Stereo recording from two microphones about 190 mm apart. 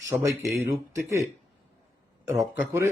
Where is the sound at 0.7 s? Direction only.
15° right (ahead or behind).